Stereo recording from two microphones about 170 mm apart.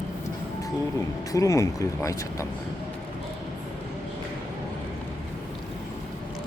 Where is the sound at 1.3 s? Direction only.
20° left (ahead or behind).